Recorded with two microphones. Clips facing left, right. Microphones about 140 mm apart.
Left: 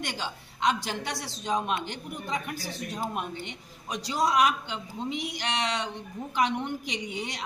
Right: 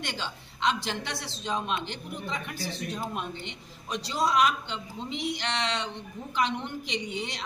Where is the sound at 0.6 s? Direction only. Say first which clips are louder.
Left 1 dB; 45° left (ahead or behind).